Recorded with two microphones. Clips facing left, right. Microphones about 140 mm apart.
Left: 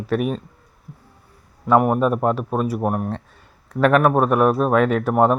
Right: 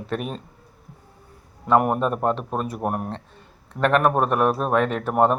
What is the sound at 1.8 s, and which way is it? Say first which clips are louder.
A man's voice: left 4 dB; centre (ahead or behind).